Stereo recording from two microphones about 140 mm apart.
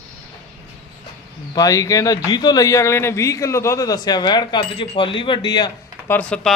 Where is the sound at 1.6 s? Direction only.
25° left (ahead or behind).